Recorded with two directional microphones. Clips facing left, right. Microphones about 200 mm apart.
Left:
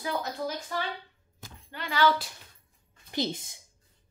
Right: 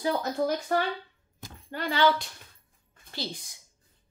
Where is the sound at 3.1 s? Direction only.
20° left (ahead or behind).